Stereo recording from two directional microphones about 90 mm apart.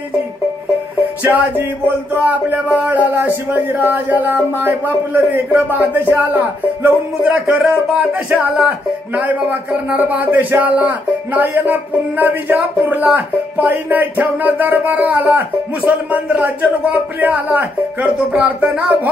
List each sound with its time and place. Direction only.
1.2 s speech: 20° right (ahead or behind)